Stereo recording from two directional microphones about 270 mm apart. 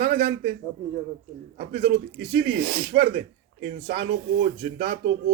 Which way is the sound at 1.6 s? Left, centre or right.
Right.